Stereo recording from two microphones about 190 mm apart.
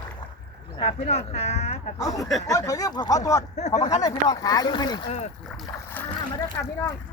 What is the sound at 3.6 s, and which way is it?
Speech, 40° left (ahead or behind).